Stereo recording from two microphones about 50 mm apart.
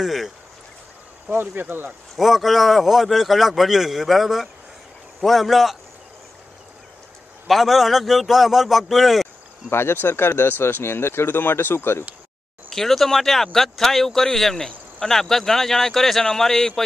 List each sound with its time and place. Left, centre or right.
0.0 s speech: centre
1.3 s speech: right
2.1 s speech: centre
7.4 s speech: centre
9.7 s speech: left
12.7 s a man's voice: centre